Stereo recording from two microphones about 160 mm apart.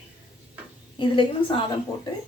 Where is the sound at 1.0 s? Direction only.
30° left (ahead or behind).